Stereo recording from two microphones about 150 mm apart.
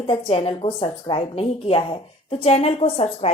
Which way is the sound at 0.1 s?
35° left (ahead or behind).